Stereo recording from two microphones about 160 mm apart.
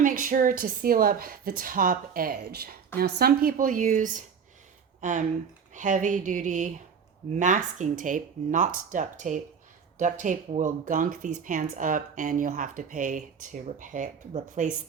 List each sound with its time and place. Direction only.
0.0 s speech: 55° right (ahead or behind)